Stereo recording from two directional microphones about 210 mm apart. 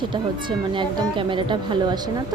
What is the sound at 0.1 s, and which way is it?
Speech, 20° right (ahead or behind).